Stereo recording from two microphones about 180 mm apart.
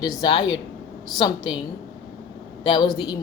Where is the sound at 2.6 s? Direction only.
25° left (ahead or behind).